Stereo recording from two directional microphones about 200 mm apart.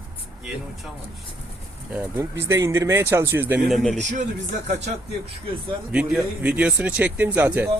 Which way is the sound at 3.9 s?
35° right (ahead or behind).